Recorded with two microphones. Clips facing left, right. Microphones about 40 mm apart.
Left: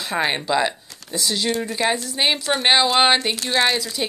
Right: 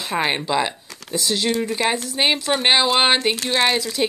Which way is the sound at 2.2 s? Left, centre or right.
Centre.